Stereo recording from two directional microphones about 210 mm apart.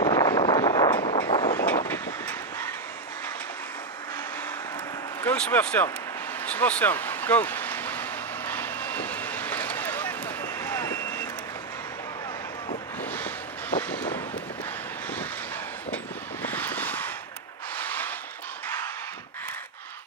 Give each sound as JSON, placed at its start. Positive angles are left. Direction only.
{"t": 0.0, "sound": "vehicle", "side_deg": 15}
{"t": 1.9, "sound": "vehicle", "side_deg": 10}
{"t": 5.2, "sound": "speech", "side_deg": 10}
{"t": 6.4, "sound": "a sound", "side_deg": 5}
{"t": 13.1, "sound": "vehicle", "side_deg": 10}
{"t": 16.4, "sound": "vehicle", "side_deg": 10}
{"t": 17.7, "sound": "a sound", "side_deg": 10}